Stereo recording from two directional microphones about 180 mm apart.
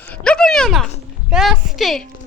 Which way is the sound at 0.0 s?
5° left (ahead or behind).